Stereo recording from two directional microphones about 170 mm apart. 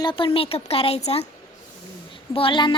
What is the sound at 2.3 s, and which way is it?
Speech, 30° left (ahead or behind).